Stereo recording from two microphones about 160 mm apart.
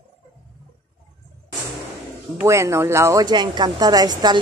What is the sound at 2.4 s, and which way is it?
A woman's voice, 20° right (ahead or behind).